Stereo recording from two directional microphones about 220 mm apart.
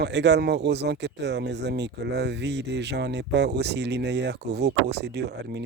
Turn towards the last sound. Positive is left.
turn(degrees=-50)  # may be behind; listen again after turning